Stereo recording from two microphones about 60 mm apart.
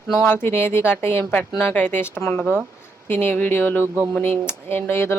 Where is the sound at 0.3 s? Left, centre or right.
Left.